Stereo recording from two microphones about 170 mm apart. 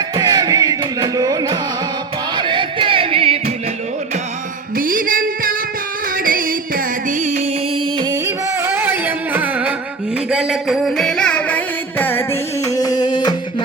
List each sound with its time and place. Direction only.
0.2 s music: 25° right (ahead or behind)
2.3 s a sound: 25° right (ahead or behind)
4.8 s music: 55° right (ahead or behind)
8.6 s music: 15° right (ahead or behind); by 13.3 s 25° left (ahead or behind)